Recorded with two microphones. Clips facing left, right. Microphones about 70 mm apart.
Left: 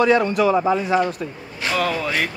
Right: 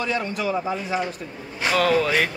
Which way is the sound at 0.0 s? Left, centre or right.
Left.